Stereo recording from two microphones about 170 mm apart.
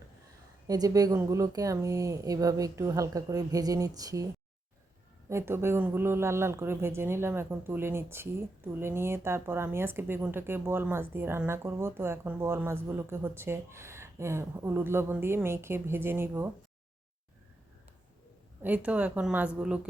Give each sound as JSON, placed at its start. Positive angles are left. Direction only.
{"t": 0.7, "sound": "speech", "side_deg": -20}
{"t": 5.3, "sound": "speech", "side_deg": -15}
{"t": 18.6, "sound": "speech", "side_deg": -10}